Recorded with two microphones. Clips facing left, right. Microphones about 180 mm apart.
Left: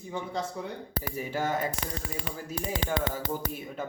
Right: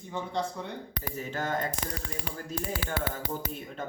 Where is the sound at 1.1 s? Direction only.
10° left (ahead or behind).